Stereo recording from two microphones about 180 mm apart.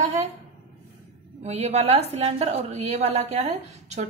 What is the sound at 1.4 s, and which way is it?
A woman's voice, 35° right (ahead or behind).